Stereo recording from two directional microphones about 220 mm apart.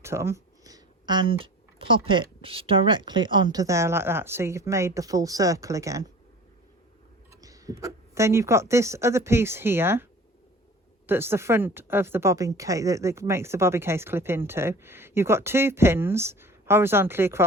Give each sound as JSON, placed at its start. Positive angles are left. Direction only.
{"t": 0.0, "sound": "speech", "side_deg": -10}
{"t": 7.4, "sound": "speech", "side_deg": -15}